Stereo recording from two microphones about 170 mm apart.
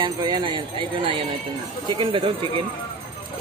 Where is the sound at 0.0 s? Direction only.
25° right (ahead or behind).